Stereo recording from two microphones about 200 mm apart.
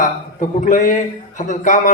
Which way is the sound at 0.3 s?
40° left (ahead or behind).